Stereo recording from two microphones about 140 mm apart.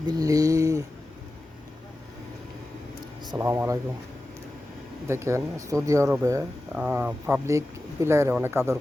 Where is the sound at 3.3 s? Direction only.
15° right (ahead or behind).